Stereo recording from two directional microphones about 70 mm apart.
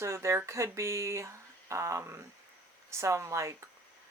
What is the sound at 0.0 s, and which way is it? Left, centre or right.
Speech, right.